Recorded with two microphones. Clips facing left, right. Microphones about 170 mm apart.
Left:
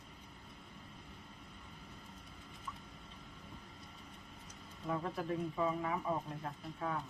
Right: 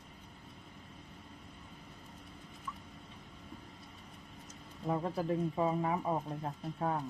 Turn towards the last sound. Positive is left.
turn(degrees=-35)  # may be behind; listen again after turning